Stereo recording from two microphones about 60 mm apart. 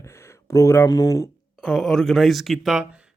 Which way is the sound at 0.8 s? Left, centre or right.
Left.